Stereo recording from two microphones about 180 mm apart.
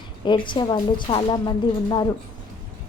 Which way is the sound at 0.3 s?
25° left (ahead or behind).